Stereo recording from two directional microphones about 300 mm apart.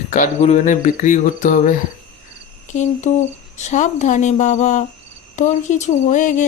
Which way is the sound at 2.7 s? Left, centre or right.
Left.